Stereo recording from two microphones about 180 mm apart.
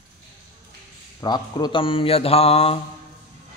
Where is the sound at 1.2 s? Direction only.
25° left (ahead or behind).